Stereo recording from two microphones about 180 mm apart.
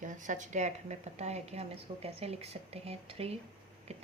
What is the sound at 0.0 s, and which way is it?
Speech, 45° right (ahead or behind).